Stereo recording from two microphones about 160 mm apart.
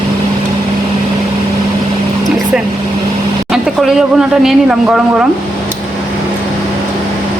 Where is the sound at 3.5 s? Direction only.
5° right (ahead or behind).